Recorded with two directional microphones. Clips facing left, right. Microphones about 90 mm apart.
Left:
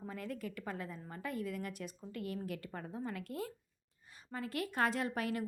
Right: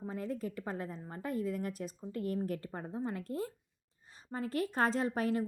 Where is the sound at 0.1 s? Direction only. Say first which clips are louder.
Right 5 dB; 30° right (ahead or behind).